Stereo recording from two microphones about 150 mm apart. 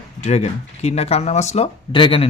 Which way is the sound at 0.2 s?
50° left (ahead or behind).